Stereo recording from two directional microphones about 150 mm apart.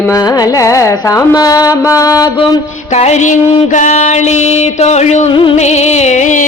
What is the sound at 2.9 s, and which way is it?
Music, 50° left (ahead or behind).